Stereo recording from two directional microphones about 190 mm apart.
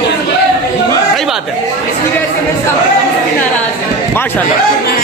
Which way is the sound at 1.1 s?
Centre (ahead or behind).